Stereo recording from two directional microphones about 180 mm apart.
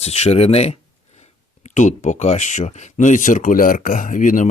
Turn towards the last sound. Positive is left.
turn(degrees=45)  # may be behind; listen again after turning